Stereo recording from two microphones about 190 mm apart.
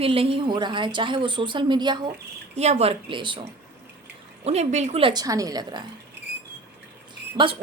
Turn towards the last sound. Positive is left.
turn(degrees=-25)  # may be behind; listen again after turning